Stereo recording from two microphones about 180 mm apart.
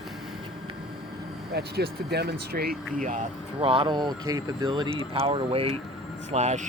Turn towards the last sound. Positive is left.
turn(degrees=-40)  # may be behind; listen again after turning